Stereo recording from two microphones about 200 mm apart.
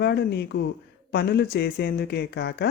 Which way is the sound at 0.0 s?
55° left (ahead or behind).